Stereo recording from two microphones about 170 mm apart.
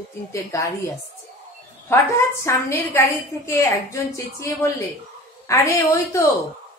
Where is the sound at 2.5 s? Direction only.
15° left (ahead or behind).